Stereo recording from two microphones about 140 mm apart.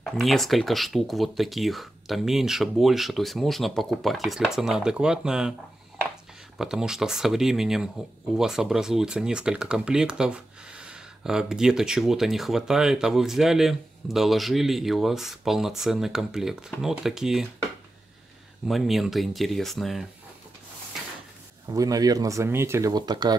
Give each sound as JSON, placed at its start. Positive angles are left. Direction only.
{"t": 0.0, "sound": "speech", "side_deg": 0}
{"t": 6.6, "sound": "speech", "side_deg": -5}
{"t": 18.7, "sound": "speech", "side_deg": 0}
{"t": 21.6, "sound": "speech", "side_deg": -25}